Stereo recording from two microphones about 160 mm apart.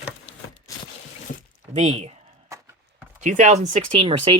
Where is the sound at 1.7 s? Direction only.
45° right (ahead or behind).